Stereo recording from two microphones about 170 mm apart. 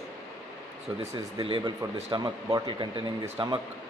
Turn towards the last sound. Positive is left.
turn(degrees=-35)  # may be behind; listen again after turning